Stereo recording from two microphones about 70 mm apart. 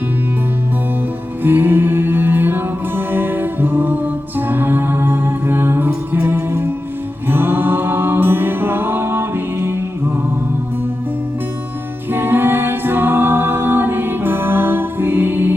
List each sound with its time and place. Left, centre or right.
1.5 s music: right
7.3 s mantra: right
12.1 s a capella: right